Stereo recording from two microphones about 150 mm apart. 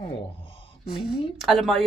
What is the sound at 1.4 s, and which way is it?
Speech, centre (ahead or behind).